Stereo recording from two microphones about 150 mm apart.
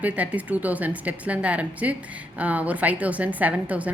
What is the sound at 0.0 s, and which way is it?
A woman's voice, 10° right (ahead or behind).